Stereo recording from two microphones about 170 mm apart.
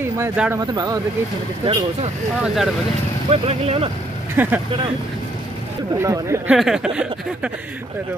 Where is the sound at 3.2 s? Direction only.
35° right (ahead or behind).